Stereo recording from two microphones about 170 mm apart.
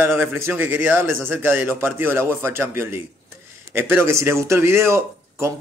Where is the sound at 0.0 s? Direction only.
15° right (ahead or behind).